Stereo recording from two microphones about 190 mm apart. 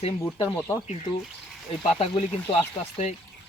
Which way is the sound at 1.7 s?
30° left (ahead or behind).